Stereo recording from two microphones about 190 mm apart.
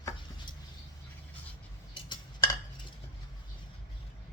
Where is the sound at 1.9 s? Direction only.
25° left (ahead or behind).